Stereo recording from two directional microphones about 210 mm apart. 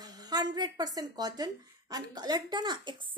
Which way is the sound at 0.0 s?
20° right (ahead or behind).